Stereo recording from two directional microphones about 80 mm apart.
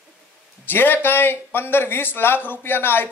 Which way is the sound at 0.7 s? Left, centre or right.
Left.